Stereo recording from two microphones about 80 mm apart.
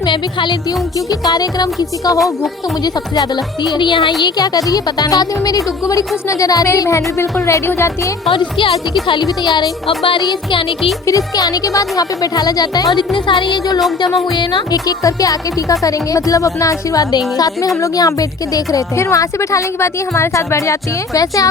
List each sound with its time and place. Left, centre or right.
0.0 s speech: left
0.9 s speech: left
2.1 s speech: centre
2.8 s speech: left
4.2 s speech: left
8.3 s music: left
9.2 s speech: left
10.0 s music: left
11.0 s speech: left
13.1 s music: left
14.3 s speech: left